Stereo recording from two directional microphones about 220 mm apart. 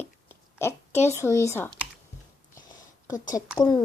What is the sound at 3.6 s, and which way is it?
Speech, 20° left (ahead or behind).